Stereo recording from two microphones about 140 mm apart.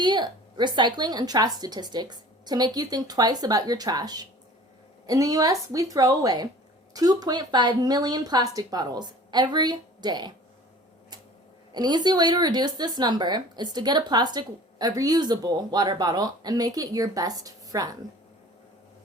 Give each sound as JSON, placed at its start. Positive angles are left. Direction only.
{"t": 0.0, "sound": "a woman's voice", "side_deg": -30}
{"t": 11.7, "sound": "a woman's voice", "side_deg": -30}